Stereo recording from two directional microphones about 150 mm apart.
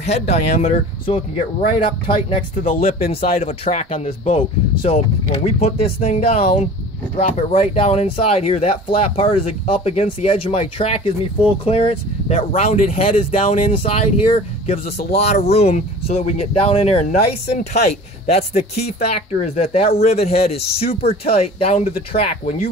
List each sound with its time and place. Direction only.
0.0 s speech: 45° left (ahead or behind)
18.2 s speech: 50° left (ahead or behind)